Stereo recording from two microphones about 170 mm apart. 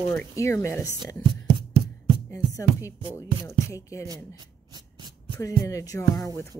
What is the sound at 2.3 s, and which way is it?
Music, 20° left (ahead or behind).